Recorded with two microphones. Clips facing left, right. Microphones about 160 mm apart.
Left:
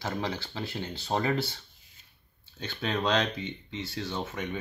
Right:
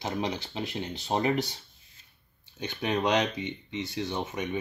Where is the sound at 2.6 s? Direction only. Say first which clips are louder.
Right 2 dB; 15° right (ahead or behind).